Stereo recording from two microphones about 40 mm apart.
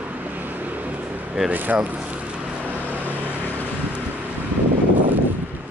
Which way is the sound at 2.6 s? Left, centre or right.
Right.